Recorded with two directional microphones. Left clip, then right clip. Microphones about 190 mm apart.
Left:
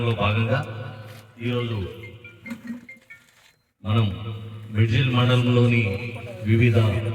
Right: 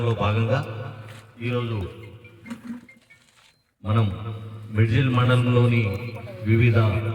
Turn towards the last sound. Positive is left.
turn(degrees=-25)  # may be behind; listen again after turning